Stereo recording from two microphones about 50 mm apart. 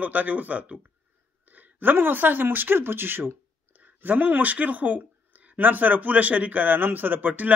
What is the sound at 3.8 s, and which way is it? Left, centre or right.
A man's voice, right.